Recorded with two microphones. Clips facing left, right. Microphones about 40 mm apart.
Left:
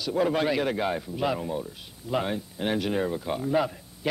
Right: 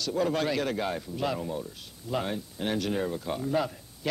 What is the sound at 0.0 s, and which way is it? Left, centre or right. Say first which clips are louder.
A man's voice: left 3 dB; centre.